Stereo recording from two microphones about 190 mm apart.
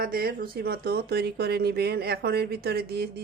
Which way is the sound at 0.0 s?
50° right (ahead or behind).